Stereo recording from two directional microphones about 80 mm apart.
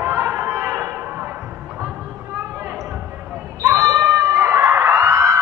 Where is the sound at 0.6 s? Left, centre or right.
Right.